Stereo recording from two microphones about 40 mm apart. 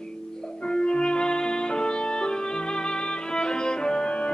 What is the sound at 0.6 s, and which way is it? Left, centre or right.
Music, left.